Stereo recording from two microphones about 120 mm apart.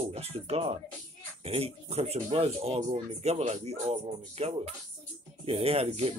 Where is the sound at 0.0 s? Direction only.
60° right (ahead or behind).